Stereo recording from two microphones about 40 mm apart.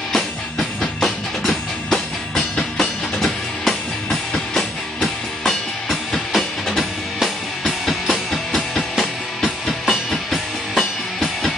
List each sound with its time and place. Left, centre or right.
0.1 s music: centre
2.8 s music: centre
8.5 s music: left
9.8 s music: centre